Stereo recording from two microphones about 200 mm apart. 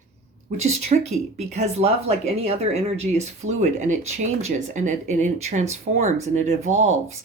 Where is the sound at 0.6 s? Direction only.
35° right (ahead or behind).